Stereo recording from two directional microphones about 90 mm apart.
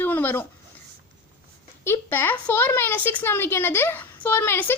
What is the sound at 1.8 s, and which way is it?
A woman's voice, 25° left (ahead or behind).